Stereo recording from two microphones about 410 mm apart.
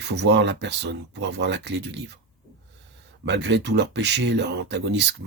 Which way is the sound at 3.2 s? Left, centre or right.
Right.